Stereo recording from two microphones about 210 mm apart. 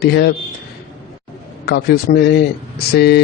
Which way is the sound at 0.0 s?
50° left (ahead or behind).